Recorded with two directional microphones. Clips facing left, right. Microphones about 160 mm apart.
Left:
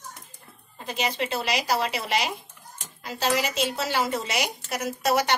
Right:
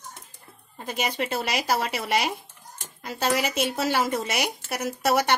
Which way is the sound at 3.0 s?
50° right (ahead or behind).